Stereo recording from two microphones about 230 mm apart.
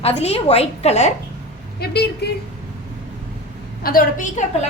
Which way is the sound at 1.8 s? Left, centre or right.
Left.